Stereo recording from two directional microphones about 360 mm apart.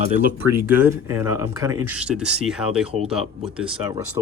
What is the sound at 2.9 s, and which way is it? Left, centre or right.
Speech, centre.